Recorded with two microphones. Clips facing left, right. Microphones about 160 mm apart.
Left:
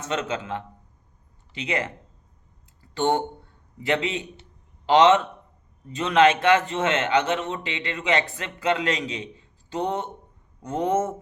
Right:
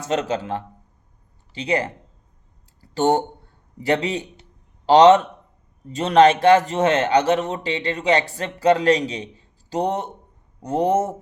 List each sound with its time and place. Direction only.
0.0 s a man's voice: 35° right (ahead or behind)
2.9 s a man's voice: 40° right (ahead or behind)